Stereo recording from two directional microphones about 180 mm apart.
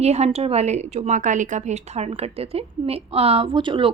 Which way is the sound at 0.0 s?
35° right (ahead or behind).